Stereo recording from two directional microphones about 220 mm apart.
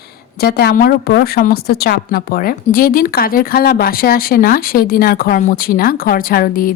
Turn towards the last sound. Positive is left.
turn(degrees=40)  # may be behind; listen again after turning